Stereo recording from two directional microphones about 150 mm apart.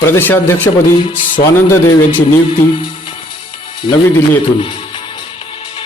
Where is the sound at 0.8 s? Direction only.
60° left (ahead or behind).